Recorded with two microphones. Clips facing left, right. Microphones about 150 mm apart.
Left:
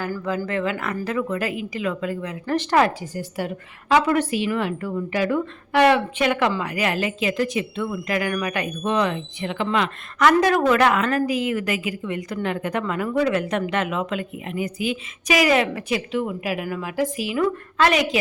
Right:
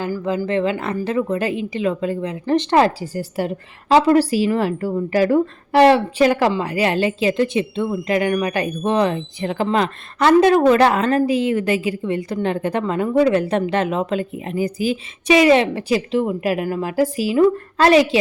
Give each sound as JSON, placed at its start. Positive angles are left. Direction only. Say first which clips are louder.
{"t": 0.3, "sound": "speech", "louder": "right 5 dB", "side_deg": -25}